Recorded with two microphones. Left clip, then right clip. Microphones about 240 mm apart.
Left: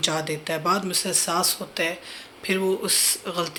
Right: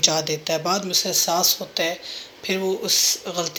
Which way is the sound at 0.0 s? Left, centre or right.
Centre.